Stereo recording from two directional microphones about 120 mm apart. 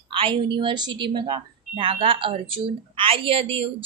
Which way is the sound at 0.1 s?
50° right (ahead or behind).